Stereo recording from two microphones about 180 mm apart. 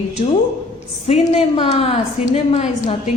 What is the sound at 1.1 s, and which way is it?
A woman's voice, 35° left (ahead or behind).